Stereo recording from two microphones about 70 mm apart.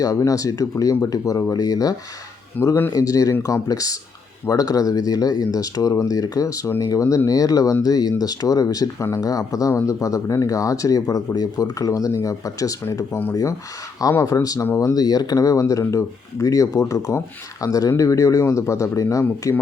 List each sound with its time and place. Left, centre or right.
0.0 s speech: left
2.6 s speech: left
2.9 s speech: left
14.0 s speech: left
14.9 s speech: left